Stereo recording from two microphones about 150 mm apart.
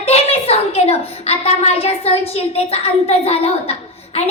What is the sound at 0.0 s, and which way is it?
A woman's voice, 40° left (ahead or behind).